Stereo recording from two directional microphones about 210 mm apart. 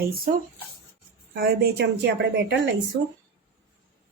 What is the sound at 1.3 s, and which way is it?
A woman's voice, 45° right (ahead or behind).